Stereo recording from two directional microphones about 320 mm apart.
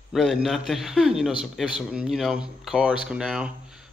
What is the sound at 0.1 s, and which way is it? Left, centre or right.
Speech, centre.